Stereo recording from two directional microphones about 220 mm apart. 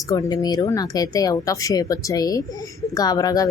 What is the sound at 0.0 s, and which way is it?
Speech, 15° left (ahead or behind).